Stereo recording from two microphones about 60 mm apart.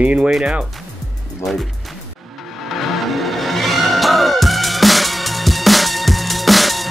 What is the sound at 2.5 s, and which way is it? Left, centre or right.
Music, centre.